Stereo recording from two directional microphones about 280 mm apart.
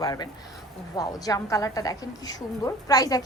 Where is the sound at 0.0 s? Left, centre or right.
Centre.